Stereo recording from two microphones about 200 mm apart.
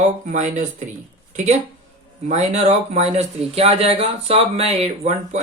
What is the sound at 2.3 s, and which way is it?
Speech, 35° right (ahead or behind).